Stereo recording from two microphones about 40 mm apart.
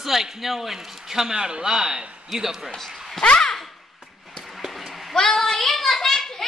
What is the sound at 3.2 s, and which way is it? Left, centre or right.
Speech, left.